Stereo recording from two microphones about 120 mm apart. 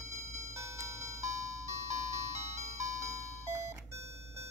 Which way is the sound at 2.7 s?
25° right (ahead or behind).